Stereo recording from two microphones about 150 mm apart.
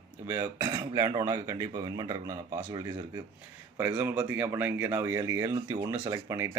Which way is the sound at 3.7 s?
15° right (ahead or behind).